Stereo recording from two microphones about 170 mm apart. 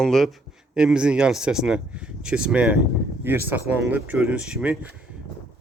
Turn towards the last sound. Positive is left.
turn(degrees=-5)  # may be behind; listen again after turning